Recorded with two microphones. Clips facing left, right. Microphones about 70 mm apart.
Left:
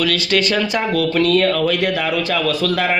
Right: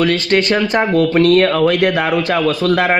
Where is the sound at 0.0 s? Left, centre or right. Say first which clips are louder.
Right 4 dB; right.